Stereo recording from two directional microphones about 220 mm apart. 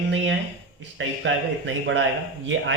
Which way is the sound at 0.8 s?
55° right (ahead or behind).